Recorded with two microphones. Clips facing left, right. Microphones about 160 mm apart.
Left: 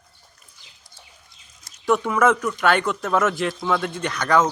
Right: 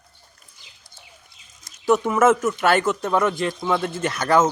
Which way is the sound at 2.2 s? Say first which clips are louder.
Right 2 dB; 5° right (ahead or behind).